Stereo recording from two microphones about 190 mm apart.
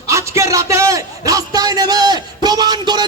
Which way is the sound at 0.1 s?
15° right (ahead or behind).